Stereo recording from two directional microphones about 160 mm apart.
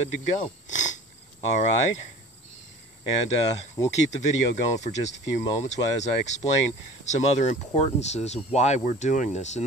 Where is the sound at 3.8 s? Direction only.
25° left (ahead or behind).